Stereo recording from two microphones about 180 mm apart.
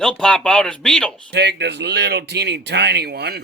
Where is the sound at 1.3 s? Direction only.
70° right (ahead or behind).